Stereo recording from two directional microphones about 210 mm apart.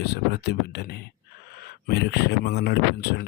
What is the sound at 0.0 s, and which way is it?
Speech, 50° left (ahead or behind).